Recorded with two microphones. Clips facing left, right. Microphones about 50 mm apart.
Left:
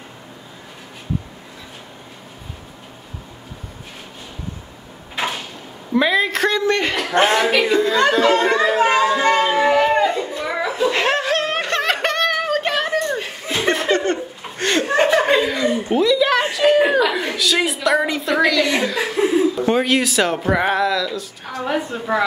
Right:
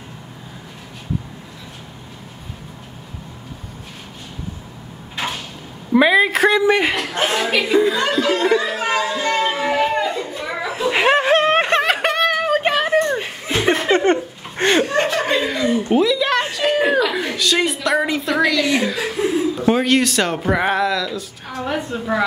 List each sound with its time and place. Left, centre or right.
5.1 s a sound: centre
5.9 s a man's voice: centre
7.2 s speech: left
7.5 s a man's voice: centre
8.0 s speech: left
8.5 s music: left
10.2 s a sound: centre
10.7 s snicker: centre
11.8 s a sound: centre
13.9 s laughter: right
14.9 s chuckle: centre
15.4 s chuckle: centre
15.9 s a woman's voice: centre